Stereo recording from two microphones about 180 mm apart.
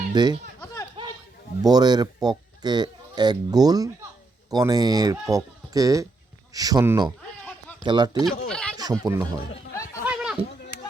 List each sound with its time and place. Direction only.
0.1 s speech: 25° right (ahead or behind)
1.6 s speech: 20° right (ahead or behind)
8.2 s speech: 5° left (ahead or behind)
8.8 s speech: 20° right (ahead or behind)
10.1 s a sound: 5° right (ahead or behind)